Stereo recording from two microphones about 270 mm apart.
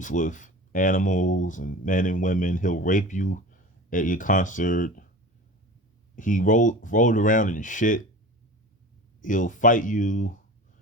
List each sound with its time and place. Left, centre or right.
0.0 s speech: left
6.1 s speech: left
9.2 s speech: left